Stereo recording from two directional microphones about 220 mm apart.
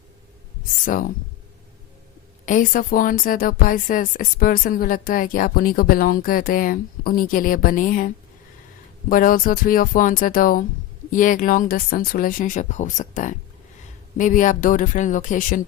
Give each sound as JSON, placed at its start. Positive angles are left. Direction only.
{"t": 2.5, "sound": "a woman's voice", "side_deg": 35}